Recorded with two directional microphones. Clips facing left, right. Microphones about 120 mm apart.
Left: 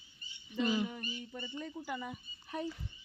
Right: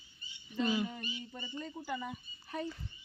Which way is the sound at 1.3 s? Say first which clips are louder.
Left 2 dB; 10° right (ahead or behind).